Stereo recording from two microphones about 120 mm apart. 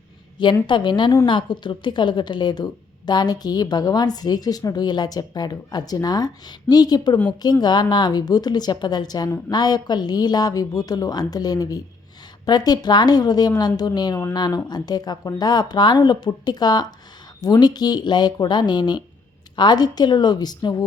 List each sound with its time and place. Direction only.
0.7 s a woman's voice: 40° left (ahead or behind)